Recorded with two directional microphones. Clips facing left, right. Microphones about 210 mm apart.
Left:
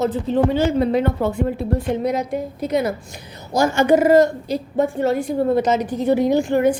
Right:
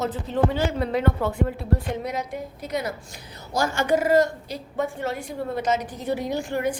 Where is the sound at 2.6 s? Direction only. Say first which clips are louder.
Left 8 dB; 25° left (ahead or behind).